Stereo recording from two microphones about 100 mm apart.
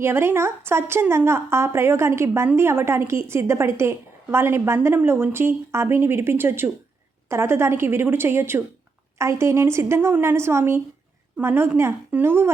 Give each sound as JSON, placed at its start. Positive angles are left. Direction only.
{"t": 0.0, "sound": "a woman's voice", "side_deg": -25}